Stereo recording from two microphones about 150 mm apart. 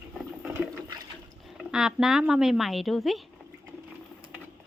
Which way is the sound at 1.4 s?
5° right (ahead or behind).